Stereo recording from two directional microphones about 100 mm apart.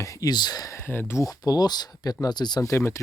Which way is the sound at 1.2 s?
40° left (ahead or behind).